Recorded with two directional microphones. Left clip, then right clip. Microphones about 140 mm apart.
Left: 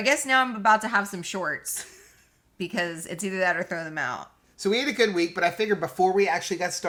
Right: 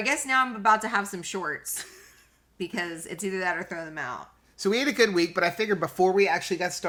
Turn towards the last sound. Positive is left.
turn(degrees=-25)  # may be behind; listen again after turning